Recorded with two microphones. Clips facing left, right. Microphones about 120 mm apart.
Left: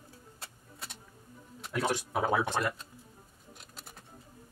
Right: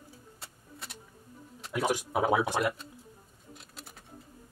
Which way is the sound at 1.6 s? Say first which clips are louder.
Right 2 dB; 10° right (ahead or behind).